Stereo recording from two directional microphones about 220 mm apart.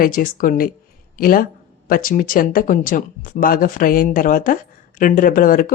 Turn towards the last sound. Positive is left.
turn(degrees=40)  # may be behind; listen again after turning